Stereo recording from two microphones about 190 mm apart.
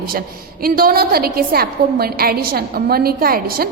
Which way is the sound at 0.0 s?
50° right (ahead or behind).